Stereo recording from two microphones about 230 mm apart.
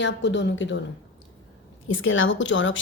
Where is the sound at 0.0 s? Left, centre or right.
Left.